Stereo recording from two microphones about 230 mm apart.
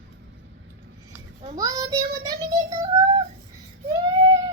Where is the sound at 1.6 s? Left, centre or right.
Centre.